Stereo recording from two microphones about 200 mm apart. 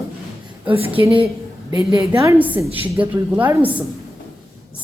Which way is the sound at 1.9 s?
15° right (ahead or behind).